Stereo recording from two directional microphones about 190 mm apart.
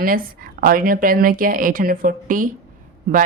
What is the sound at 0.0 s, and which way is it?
A woman's voice, 50° right (ahead or behind).